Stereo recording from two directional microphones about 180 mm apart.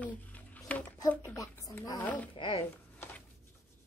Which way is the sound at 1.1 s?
15° left (ahead or behind).